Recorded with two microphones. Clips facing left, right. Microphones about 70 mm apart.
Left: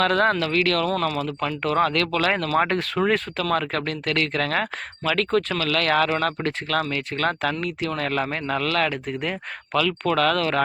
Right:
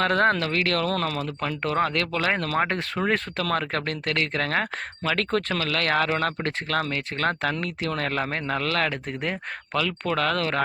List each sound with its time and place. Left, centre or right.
0.0 s speech: right
3.5 s speech: right